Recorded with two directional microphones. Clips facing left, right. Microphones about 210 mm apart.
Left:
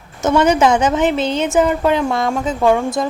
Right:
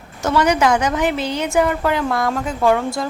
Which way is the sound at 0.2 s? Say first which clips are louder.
Left 3 dB; 20° left (ahead or behind).